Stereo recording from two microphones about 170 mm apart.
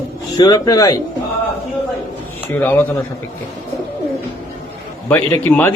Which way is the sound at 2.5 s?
10° left (ahead or behind).